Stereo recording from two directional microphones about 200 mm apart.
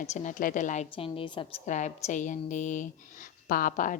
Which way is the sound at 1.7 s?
35° left (ahead or behind).